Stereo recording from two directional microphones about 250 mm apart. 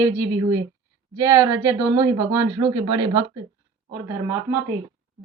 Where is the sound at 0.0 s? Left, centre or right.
Centre.